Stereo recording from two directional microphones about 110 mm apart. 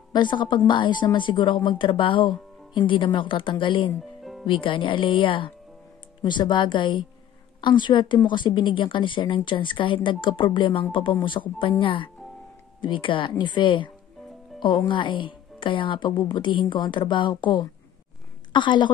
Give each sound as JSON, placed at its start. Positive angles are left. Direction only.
{"t": 0.1, "sound": "a woman's voice", "side_deg": 45}
{"t": 4.2, "sound": "music", "side_deg": 0}
{"t": 4.5, "sound": "a woman's voice", "side_deg": 50}
{"t": 14.9, "sound": "a woman's voice", "side_deg": 50}